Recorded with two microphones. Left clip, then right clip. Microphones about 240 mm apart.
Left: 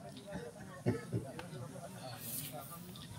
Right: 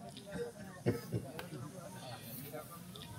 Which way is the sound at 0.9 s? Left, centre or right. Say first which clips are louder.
Right 1 dB; right.